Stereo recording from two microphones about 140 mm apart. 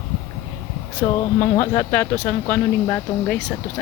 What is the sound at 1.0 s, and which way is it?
Speech, 30° left (ahead or behind).